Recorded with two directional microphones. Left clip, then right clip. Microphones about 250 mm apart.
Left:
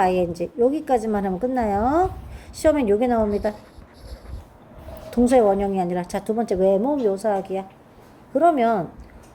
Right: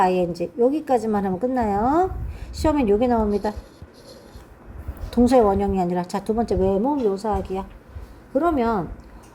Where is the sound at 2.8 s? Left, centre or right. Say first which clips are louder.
Right 1 dB; centre.